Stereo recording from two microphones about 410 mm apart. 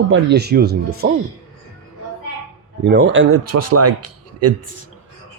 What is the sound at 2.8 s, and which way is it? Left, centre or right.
Speech, right.